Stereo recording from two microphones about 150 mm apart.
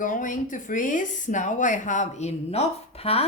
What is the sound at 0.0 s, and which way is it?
Speech, 60° left (ahead or behind).